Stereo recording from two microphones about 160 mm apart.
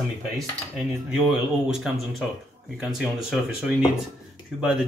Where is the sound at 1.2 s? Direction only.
Centre (ahead or behind).